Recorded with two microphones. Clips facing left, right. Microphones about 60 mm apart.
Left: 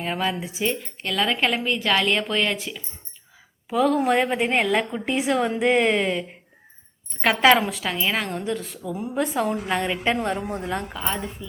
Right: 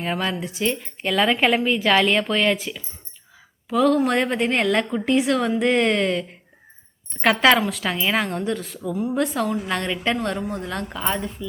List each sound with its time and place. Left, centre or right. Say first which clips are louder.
0.0 s a woman's voice: right 1 dB; centre
1.0 s a woman's voice: right 4 dB; centre
3.7 s a woman's voice: right 1 dB; centre
9.1 s a woman's voice: left 1 dB; centre
10.9 s a woman's voice: right 3 dB; centre